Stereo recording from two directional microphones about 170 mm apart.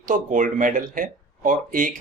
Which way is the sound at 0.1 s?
50° right (ahead or behind).